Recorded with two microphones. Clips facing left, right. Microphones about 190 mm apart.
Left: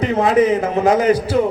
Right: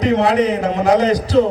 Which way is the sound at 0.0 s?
70° right (ahead or behind).